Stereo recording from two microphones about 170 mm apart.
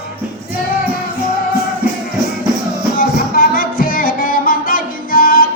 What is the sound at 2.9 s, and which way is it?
Music, 60° left (ahead or behind).